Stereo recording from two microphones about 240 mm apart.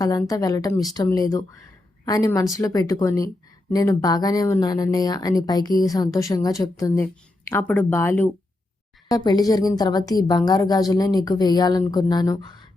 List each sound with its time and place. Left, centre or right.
0.2 s speech: centre